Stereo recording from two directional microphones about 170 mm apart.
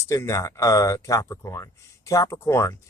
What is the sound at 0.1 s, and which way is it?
Speech, 20° left (ahead or behind).